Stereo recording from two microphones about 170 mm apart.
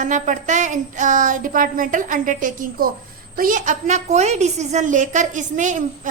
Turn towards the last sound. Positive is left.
turn(degrees=-50)  # may be behind; listen again after turning